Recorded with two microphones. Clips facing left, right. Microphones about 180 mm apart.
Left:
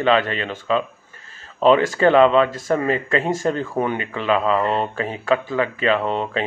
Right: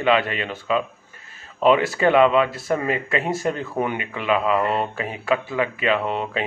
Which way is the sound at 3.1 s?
10° right (ahead or behind).